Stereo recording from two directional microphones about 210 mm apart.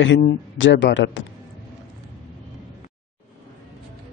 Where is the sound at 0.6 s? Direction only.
60° left (ahead or behind).